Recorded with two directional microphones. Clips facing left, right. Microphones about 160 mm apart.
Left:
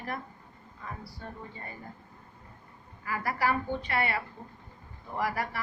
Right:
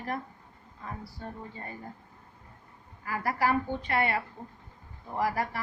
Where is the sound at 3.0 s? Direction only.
40° right (ahead or behind).